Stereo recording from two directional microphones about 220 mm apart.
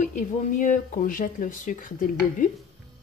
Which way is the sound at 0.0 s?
35° left (ahead or behind).